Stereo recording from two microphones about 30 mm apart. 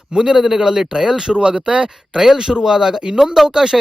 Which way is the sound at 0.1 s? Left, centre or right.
Right.